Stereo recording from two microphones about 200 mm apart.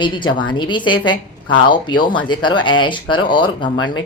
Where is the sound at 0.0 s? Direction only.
25° left (ahead or behind).